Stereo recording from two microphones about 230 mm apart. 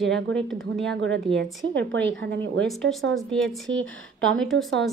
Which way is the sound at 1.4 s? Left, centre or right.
Right.